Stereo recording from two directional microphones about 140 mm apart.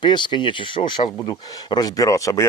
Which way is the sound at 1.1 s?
25° left (ahead or behind).